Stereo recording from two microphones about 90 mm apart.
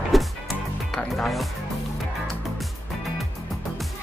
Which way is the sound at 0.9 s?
Centre (ahead or behind).